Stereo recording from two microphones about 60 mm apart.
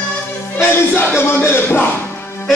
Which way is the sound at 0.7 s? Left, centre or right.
Left.